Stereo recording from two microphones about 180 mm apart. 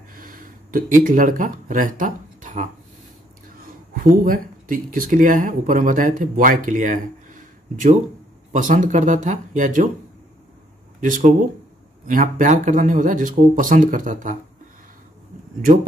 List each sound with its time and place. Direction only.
0.1 s speech: 50° right (ahead or behind)
3.6 s a sound: 50° right (ahead or behind)
4.2 s speech: 50° right (ahead or behind)
11.0 s speech: 50° right (ahead or behind)